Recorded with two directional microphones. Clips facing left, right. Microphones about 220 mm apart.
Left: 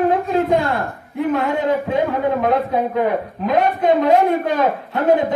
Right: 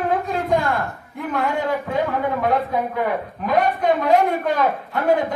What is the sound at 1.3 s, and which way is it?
Speech, 20° left (ahead or behind).